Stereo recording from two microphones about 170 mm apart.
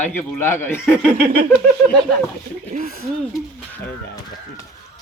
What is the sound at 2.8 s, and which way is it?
Speech, 55° right (ahead or behind).